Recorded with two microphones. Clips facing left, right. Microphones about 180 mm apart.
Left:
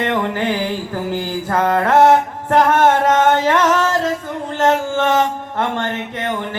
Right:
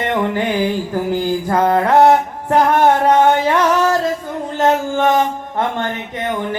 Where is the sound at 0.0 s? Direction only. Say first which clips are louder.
Right 1 dB; 15° right (ahead or behind).